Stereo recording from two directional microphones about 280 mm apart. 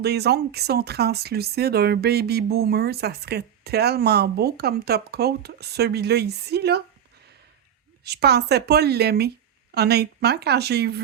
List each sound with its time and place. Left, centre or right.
0.0 s speech: right
8.0 s speech: right